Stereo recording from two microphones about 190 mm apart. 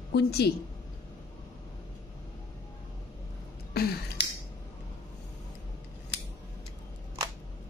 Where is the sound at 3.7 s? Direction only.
55° left (ahead or behind).